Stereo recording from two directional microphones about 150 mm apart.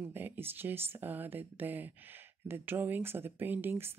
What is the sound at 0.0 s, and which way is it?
Speech, 15° right (ahead or behind).